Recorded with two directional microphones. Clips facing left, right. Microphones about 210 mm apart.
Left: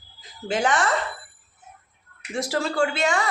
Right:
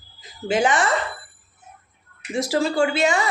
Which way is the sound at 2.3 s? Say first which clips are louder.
Right 4 dB; 5° right (ahead or behind).